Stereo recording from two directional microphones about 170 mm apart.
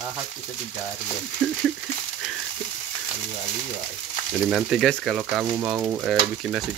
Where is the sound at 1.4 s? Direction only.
5° left (ahead or behind).